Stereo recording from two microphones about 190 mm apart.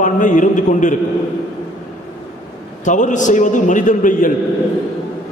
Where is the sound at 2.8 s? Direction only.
40° left (ahead or behind).